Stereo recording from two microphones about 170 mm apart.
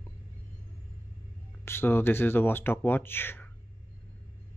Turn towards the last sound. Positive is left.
turn(degrees=10)  # may be behind; listen again after turning